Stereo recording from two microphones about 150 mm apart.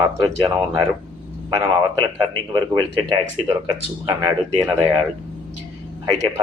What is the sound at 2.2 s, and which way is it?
Speech, 30° right (ahead or behind).